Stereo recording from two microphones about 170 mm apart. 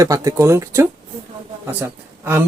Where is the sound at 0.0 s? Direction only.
20° right (ahead or behind).